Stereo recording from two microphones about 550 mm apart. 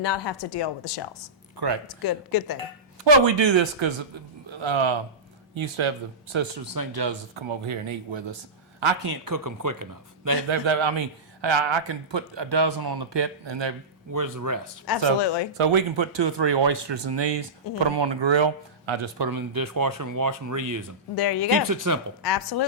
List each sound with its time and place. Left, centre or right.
0.0 s a woman's voice: left
1.5 s speech: right
2.0 s speech: left
3.0 s speech: right
6.7 s speech: right
9.2 s speech: right
10.5 s speech: right
14.1 s speech: right
14.8 s a woman's voice: left
15.5 s speech: right
19.3 s speech: right
21.2 s speech: left
21.6 s speech: right
22.2 s speech: left